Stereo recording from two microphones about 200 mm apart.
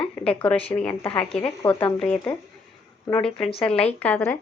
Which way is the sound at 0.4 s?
5° left (ahead or behind).